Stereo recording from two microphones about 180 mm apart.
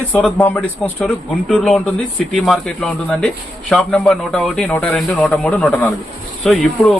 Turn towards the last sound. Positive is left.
turn(degrees=0)  # may be behind; listen again after turning